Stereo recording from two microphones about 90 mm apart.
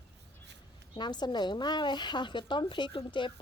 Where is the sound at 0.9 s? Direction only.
55° left (ahead or behind).